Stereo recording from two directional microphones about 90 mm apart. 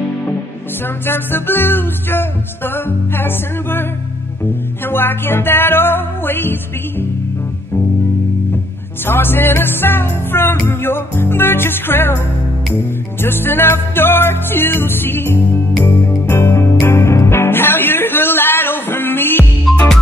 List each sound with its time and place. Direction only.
1.0 s music: 25° left (ahead or behind)
4.8 s music: 25° left (ahead or behind)
9.0 s music: 25° left (ahead or behind)
13.2 s music: 25° left (ahead or behind)